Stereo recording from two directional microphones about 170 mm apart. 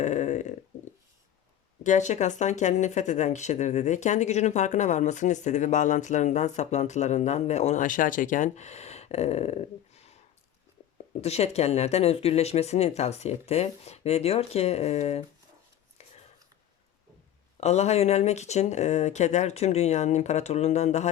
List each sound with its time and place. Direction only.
0.0 s a sound: 45° left (ahead or behind)
1.8 s speech: 45° left (ahead or behind)
17.6 s speech: 40° left (ahead or behind)